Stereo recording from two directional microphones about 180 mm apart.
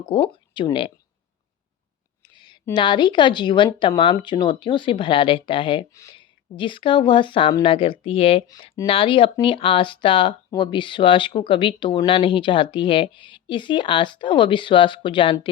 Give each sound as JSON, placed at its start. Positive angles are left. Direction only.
{"t": 0.2, "sound": "speech", "side_deg": 25}
{"t": 2.2, "sound": "a sound", "side_deg": 25}
{"t": 2.7, "sound": "speech", "side_deg": 25}
{"t": 5.9, "sound": "speech", "side_deg": 20}